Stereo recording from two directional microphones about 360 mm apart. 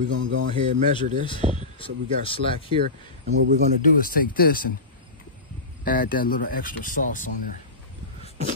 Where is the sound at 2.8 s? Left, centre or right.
Right.